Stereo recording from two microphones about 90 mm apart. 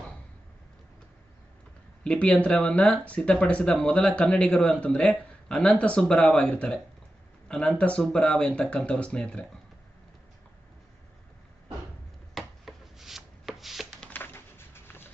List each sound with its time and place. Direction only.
2.0 s speech: 10° left (ahead or behind)
12.3 s chopping: centre (ahead or behind)
14.1 s a sound: 25° left (ahead or behind)